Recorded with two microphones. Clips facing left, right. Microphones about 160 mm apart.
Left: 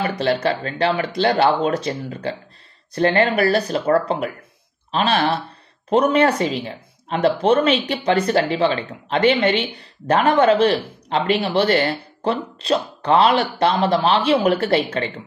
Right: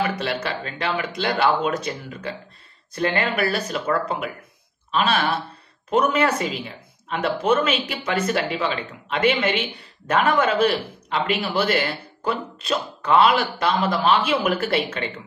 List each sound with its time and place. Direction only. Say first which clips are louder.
0.0 s speech: left 5 dB; 35° left (ahead or behind)